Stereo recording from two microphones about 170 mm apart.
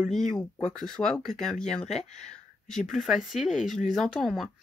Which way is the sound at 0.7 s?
5° left (ahead or behind).